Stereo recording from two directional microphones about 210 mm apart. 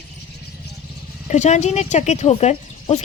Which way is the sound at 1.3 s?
35° left (ahead or behind).